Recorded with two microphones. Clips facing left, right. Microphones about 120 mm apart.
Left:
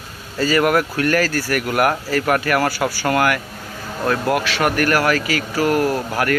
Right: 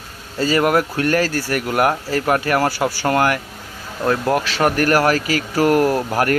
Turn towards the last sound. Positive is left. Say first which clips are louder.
# right 2 dB
turn(degrees=-30)  # may be behind; listen again after turning